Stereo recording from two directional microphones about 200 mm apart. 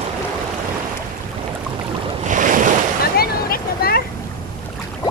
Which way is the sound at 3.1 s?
50° left (ahead or behind).